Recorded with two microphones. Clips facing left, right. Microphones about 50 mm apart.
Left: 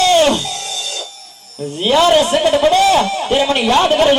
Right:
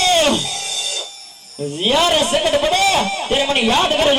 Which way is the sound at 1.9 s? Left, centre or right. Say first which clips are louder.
Left 5 dB; centre.